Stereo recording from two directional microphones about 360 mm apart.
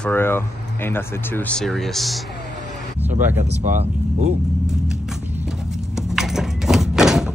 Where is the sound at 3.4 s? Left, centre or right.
Centre.